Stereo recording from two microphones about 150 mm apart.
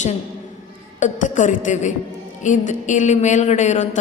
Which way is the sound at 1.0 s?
55° left (ahead or behind).